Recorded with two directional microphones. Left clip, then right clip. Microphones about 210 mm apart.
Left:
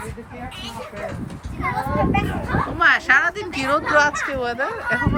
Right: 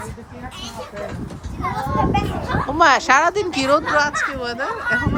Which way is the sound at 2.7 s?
20° right (ahead or behind).